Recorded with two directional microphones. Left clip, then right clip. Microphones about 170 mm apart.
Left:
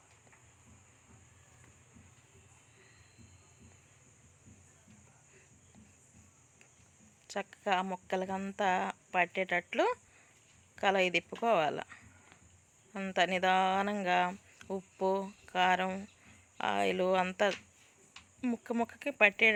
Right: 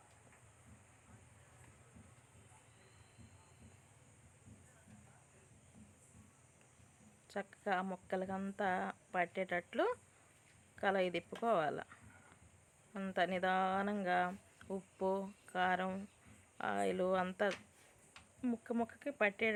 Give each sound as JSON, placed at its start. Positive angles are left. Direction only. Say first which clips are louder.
{"t": 7.3, "sound": "speech", "louder": "left 6 dB", "side_deg": 15}